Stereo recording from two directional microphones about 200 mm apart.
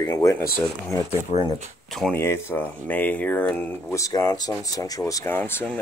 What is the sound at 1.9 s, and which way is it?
Speech, centre (ahead or behind).